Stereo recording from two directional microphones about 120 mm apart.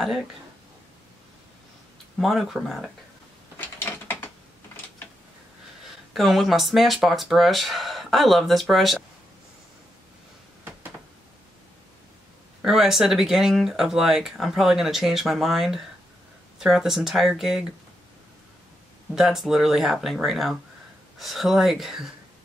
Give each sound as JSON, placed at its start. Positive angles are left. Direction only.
{"t": 2.1, "sound": "speech", "side_deg": 0}
{"t": 3.5, "sound": "a sound", "side_deg": 20}
{"t": 5.9, "sound": "speech", "side_deg": 0}
{"t": 12.6, "sound": "speech", "side_deg": 0}
{"t": 19.1, "sound": "speech", "side_deg": 0}